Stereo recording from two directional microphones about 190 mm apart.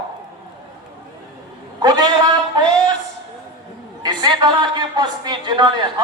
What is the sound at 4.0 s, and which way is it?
A man's voice, 20° right (ahead or behind).